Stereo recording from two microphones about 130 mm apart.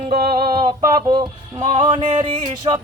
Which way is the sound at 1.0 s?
35° right (ahead or behind).